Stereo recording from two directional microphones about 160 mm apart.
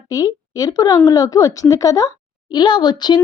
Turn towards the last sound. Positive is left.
turn(degrees=25)  # may be behind; listen again after turning